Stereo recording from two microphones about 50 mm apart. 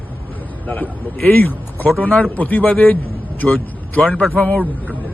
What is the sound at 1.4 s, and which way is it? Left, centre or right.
A man's voice, left.